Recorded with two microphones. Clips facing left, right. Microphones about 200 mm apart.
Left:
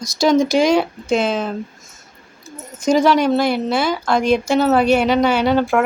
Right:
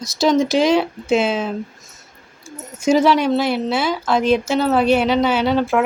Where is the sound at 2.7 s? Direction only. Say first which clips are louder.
Even; 5° right (ahead or behind).